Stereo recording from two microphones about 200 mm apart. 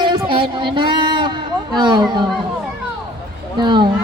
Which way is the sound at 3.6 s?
20° right (ahead or behind).